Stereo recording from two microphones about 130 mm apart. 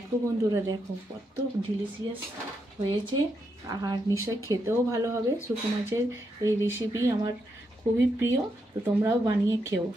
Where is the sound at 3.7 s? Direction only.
30° right (ahead or behind).